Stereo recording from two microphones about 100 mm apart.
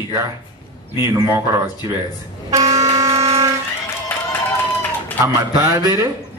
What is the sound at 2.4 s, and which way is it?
Vehicle, 35° right (ahead or behind).